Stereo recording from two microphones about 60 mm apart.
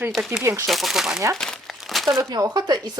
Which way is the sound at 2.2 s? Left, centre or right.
Right.